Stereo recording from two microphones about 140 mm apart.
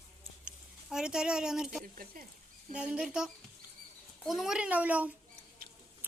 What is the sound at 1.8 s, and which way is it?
Speech, 85° right.